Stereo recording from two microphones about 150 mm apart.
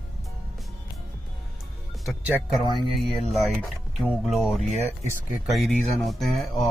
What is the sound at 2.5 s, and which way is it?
Speech, centre (ahead or behind).